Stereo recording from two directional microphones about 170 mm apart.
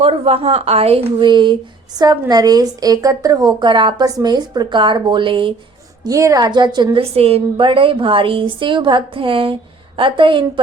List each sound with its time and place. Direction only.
0.0 s a woman's voice: 35° right (ahead or behind)
6.1 s a woman's voice: 20° right (ahead or behind)